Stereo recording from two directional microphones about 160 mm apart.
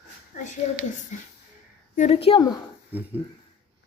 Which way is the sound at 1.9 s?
40° left (ahead or behind).